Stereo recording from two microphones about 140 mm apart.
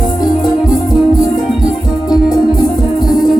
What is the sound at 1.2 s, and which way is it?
Music, 30° left (ahead or behind).